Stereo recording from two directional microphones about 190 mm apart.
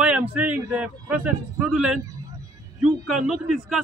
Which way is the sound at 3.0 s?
Centre (ahead or behind).